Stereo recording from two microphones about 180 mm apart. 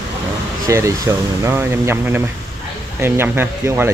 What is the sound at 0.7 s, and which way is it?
Speech, 15° right (ahead or behind).